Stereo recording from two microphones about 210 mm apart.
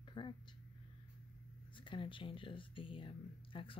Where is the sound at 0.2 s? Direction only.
20° left (ahead or behind).